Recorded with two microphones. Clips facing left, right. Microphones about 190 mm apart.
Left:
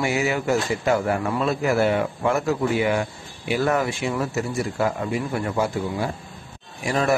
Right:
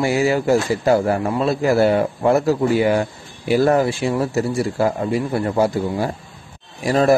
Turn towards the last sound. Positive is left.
turn(degrees=-35)  # may be behind; listen again after turning